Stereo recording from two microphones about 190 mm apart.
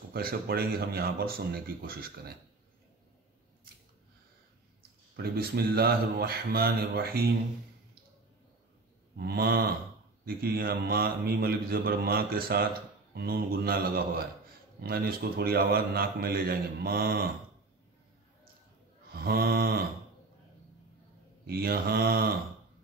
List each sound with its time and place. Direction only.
0.1 s a man's voice: 55° right (ahead or behind)
5.1 s a man's voice: 55° right (ahead or behind)
9.2 s a man's voice: 55° right (ahead or behind)
19.1 s mantra: 55° right (ahead or behind)
21.5 s a man's voice: 55° right (ahead or behind)